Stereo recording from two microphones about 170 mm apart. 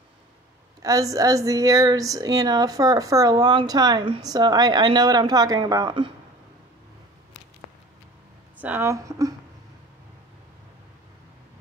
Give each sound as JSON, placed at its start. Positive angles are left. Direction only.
{"t": 0.8, "sound": "speech", "side_deg": -20}
{"t": 8.5, "sound": "a woman's voice", "side_deg": -10}